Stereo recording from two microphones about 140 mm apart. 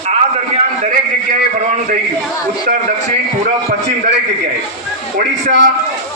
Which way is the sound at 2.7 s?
80° right.